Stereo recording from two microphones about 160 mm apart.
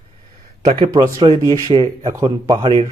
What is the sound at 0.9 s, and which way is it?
Speech, 25° right (ahead or behind).